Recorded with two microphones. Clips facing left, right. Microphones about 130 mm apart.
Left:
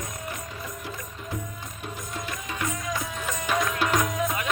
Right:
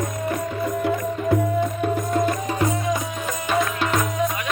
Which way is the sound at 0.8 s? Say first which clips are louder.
Right 15 dB; 60° right (ahead or behind).